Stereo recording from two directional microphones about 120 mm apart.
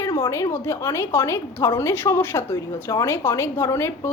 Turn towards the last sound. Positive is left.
turn(degrees=20)  # may be behind; listen again after turning